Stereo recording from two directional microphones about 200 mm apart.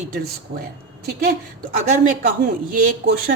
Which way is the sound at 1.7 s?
35° right (ahead or behind).